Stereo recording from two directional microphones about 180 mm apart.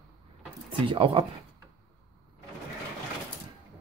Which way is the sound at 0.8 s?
30° right (ahead or behind).